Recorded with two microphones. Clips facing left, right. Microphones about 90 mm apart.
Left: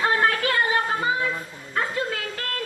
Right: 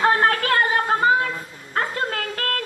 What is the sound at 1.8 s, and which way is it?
Music, 50° right (ahead or behind).